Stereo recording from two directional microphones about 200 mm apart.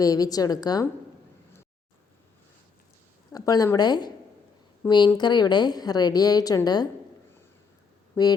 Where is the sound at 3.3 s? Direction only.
20° left (ahead or behind).